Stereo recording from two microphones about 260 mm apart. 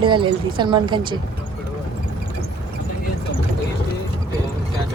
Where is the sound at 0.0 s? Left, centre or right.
Centre.